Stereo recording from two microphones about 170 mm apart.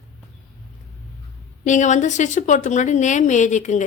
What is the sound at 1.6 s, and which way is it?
Speech, 45° left (ahead or behind).